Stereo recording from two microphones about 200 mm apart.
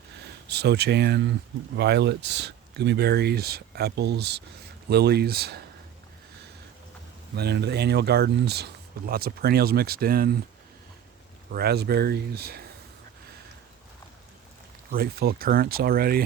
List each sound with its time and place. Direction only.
0.4 s speech: 55° right (ahead or behind)
7.3 s speech: 55° right (ahead or behind)
11.5 s speech: 50° right (ahead or behind)
14.9 s speech: 50° right (ahead or behind)